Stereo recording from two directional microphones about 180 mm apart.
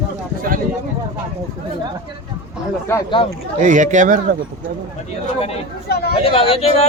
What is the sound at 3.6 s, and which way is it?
Speech, 45° right (ahead or behind).